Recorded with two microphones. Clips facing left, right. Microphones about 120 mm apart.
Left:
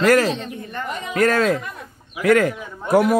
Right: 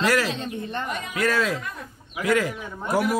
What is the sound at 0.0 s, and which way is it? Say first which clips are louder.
A man's voice: left 6 dB; 50° left (ahead or behind).